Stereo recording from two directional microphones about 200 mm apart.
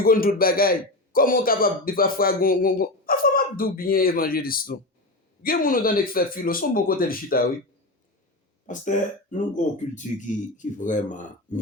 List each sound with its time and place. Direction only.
0.0 s a man's voice: 45° left (ahead or behind)
8.7 s speech: 40° left (ahead or behind)